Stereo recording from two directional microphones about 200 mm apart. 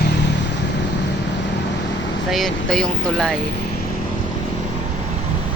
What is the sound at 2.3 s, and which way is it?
Speech, centre (ahead or behind).